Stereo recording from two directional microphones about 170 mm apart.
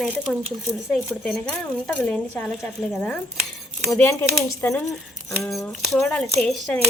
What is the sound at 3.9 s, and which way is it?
Speech, 15° left (ahead or behind).